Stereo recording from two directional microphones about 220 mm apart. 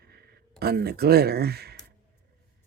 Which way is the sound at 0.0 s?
45° right (ahead or behind).